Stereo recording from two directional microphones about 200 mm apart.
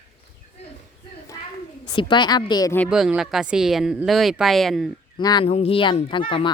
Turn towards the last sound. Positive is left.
turn(degrees=25)  # may be behind; listen again after turning